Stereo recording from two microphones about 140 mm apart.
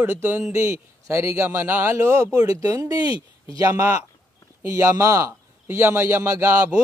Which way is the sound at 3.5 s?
25° right (ahead or behind).